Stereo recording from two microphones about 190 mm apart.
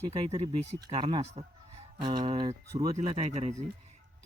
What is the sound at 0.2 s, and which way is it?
Speech, 25° right (ahead or behind).